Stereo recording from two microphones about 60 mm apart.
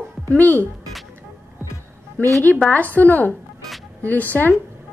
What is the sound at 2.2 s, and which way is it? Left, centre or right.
Speech, left.